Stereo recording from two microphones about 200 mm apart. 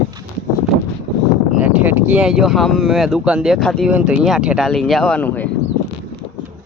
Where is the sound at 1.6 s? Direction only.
10° right (ahead or behind); by 5.5 s 10° left (ahead or behind).